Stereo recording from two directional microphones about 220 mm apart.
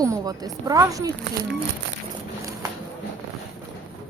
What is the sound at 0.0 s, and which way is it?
Speech, 15° right (ahead or behind).